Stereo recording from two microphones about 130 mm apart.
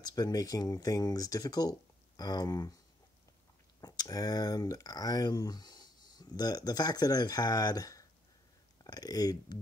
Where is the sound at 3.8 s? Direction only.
30° left (ahead or behind).